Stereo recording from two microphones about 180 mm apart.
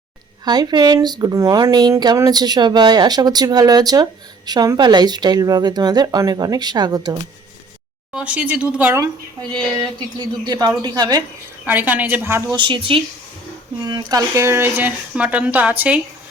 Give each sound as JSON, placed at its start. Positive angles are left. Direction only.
{"t": 0.4, "sound": "a woman's voice", "side_deg": -20}
{"t": 8.1, "sound": "speech", "side_deg": -5}
{"t": 9.8, "sound": "a woman's voice", "side_deg": -25}
{"t": 11.6, "sound": "speech", "side_deg": -10}
{"t": 12.5, "sound": "a woman's voice", "side_deg": -25}